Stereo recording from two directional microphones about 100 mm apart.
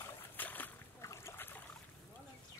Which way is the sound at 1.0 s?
30° left (ahead or behind).